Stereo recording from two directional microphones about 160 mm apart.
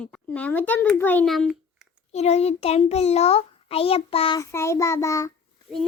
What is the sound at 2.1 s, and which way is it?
A child's voice, 40° left (ahead or behind).